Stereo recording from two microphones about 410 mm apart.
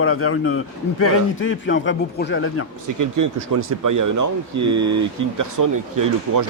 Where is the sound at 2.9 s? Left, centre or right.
Right.